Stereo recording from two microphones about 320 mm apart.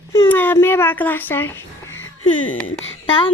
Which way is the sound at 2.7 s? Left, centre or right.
Centre.